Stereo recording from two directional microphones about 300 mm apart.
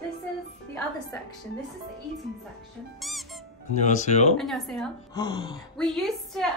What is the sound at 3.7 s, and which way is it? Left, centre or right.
Speech, left.